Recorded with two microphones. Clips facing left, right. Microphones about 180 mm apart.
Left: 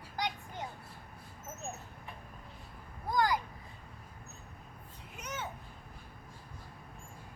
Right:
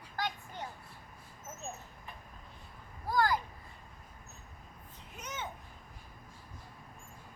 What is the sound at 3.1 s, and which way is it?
Speech, 15° left (ahead or behind).